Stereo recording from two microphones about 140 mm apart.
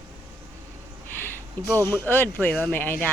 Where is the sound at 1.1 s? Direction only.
15° left (ahead or behind).